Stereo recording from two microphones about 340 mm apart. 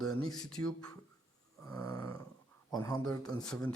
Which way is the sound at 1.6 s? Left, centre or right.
Centre.